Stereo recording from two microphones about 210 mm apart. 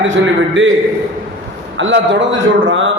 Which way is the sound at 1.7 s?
60° right (ahead or behind).